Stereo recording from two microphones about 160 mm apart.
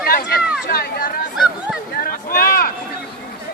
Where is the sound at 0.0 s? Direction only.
65° left (ahead or behind).